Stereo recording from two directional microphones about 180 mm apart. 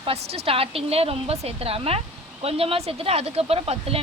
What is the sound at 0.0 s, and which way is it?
Speech, 35° right (ahead or behind).